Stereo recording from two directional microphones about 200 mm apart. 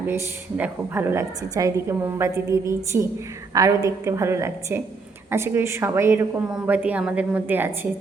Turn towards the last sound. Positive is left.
turn(degrees=-10)  # may be behind; listen again after turning